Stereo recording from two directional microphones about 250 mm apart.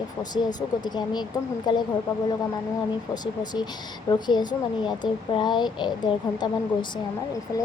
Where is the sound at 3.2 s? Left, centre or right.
Centre.